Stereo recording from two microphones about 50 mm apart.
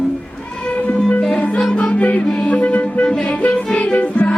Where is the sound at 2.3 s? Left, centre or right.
Left.